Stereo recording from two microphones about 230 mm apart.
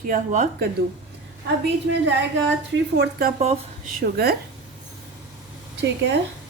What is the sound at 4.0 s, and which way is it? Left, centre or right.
Speech, right.